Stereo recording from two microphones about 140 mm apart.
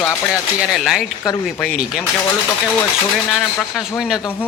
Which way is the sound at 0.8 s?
Centre (ahead or behind).